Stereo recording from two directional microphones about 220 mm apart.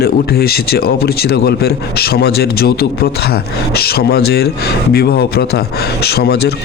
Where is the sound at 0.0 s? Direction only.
45° left (ahead or behind).